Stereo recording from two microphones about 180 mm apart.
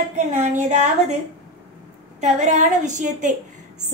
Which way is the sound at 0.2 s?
40° right (ahead or behind).